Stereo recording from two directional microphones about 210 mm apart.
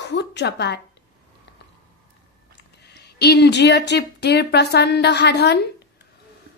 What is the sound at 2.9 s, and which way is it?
A woman's voice, 50° left (ahead or behind).